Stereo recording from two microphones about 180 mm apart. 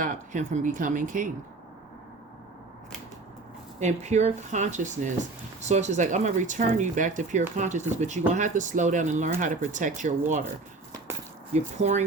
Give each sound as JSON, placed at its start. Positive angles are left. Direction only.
{"t": 0.0, "sound": "speech", "side_deg": -45}
{"t": 3.8, "sound": "speech", "side_deg": -40}
{"t": 11.5, "sound": "speech", "side_deg": -40}